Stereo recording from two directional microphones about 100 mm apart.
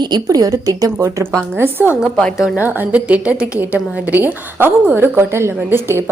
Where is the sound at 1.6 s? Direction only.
20° right (ahead or behind).